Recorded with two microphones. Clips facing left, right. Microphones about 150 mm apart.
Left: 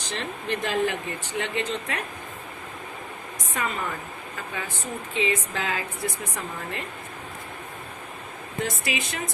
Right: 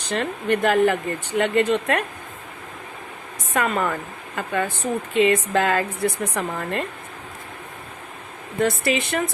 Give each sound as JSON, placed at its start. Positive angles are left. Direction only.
{"t": 0.0, "sound": "speech", "side_deg": -60}
{"t": 3.5, "sound": "speech", "side_deg": -70}
{"t": 8.6, "sound": "speech", "side_deg": -60}